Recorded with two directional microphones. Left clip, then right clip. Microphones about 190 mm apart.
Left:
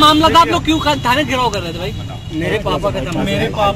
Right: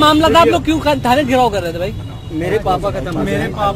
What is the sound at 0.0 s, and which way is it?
Speech, 70° right (ahead or behind).